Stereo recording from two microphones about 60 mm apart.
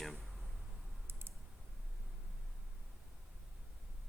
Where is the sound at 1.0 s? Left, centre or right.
Right.